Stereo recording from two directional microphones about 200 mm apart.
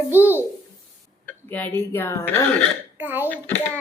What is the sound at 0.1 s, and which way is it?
Speech, 10° right (ahead or behind).